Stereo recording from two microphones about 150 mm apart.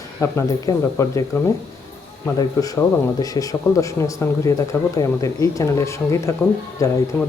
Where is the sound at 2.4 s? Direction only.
25° left (ahead or behind).